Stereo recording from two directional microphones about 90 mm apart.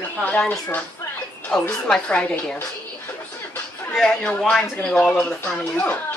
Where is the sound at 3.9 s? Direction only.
5° left (ahead or behind).